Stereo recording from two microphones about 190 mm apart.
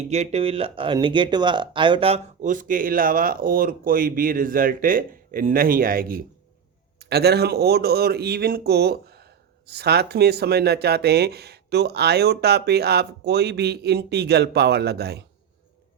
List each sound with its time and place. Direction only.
0.0 s speech: 35° right (ahead or behind); by 15.3 s 60° right (ahead or behind)